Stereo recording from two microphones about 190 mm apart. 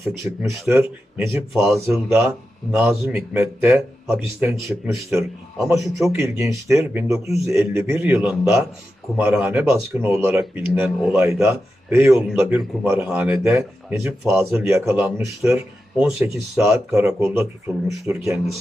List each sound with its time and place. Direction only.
0.0 s speech: 15° right (ahead or behind)